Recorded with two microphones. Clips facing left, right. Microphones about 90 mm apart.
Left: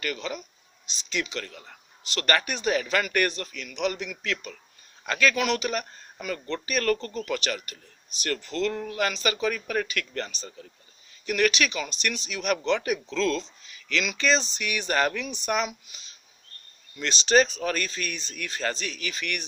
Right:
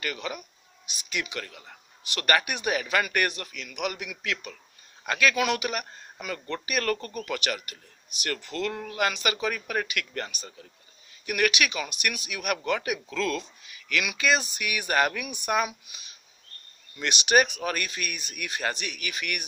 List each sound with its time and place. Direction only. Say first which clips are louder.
0.0 s speech: left 1 dB; 20° right (ahead or behind)